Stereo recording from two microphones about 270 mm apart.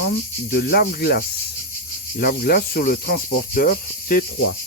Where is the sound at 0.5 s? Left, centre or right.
Left.